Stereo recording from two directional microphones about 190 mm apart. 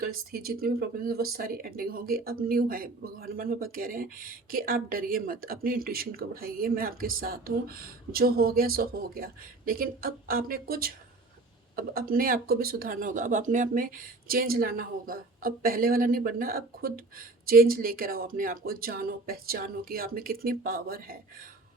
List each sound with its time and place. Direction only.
0.0 s speech: 50° right (ahead or behind)